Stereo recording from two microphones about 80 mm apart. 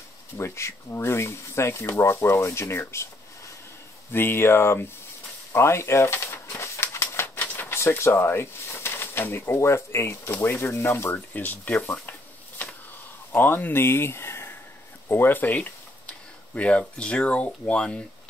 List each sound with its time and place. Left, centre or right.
0.4 s speech: left
4.1 s speech: left
6.6 s a sound: left
7.3 s a sound: left
7.8 s speech: left
11.3 s speech: left
11.8 s speech: left
13.3 s speech: left